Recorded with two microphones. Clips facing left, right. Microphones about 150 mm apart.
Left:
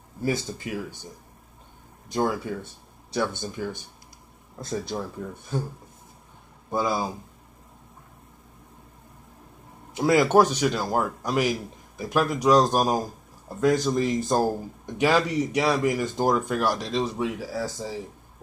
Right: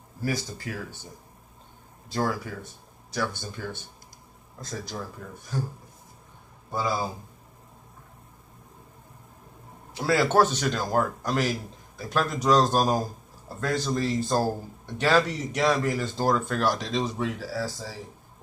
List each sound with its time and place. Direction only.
0.2 s speech: 20° left (ahead or behind)
2.0 s speech: 20° left (ahead or behind)
4.9 s speech: 30° left (ahead or behind)
6.7 s speech: 15° left (ahead or behind)
9.9 s speech: 15° left (ahead or behind)
17.5 s speech: 15° left (ahead or behind)